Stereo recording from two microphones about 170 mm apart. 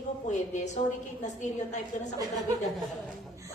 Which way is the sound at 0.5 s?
45° left (ahead or behind).